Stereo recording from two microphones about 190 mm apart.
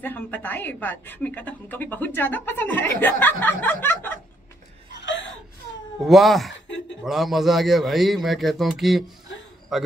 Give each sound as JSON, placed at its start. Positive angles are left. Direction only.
{"t": 0.0, "sound": "a woman's voice", "side_deg": 10}
{"t": 5.0, "sound": "gasp", "side_deg": 75}
{"t": 5.9, "sound": "a man's voice", "side_deg": 0}